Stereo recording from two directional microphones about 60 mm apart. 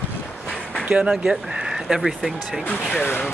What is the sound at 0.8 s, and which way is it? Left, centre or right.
Speech, centre.